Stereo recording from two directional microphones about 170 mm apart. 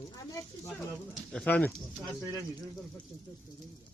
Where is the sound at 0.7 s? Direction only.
5° left (ahead or behind).